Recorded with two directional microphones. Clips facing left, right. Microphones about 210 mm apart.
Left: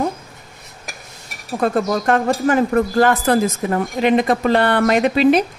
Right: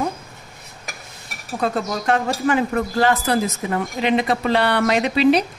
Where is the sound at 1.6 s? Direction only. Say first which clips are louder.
Left 5 dB; 50° left (ahead or behind).